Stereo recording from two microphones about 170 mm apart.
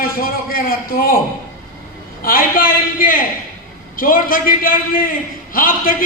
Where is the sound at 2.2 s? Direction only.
60° left (ahead or behind).